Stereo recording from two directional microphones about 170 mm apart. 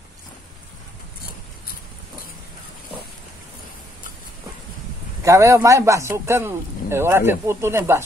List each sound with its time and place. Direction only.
5.2 s a man's voice: 15° right (ahead or behind)